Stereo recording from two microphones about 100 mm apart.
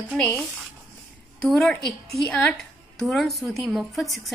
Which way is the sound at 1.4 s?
5° left (ahead or behind).